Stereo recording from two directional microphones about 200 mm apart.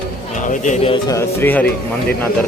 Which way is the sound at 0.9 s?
15° left (ahead or behind).